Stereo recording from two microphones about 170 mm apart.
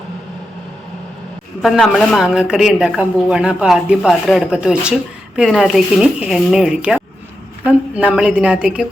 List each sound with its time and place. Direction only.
1.6 s a woman's voice: centre (ahead or behind)